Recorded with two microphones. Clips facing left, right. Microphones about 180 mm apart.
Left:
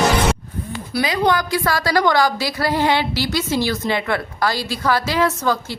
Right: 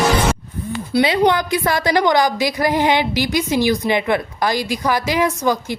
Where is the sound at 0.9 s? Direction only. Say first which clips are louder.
Right 3 dB; 25° right (ahead or behind).